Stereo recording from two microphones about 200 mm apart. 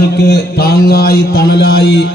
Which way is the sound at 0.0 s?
55° left (ahead or behind).